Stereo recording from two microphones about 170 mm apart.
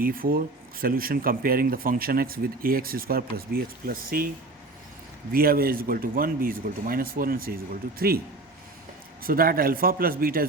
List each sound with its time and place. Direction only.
0.0 s speech: 55° right (ahead or behind)
5.3 s speech: 60° right (ahead or behind)
9.2 s speech: 60° right (ahead or behind)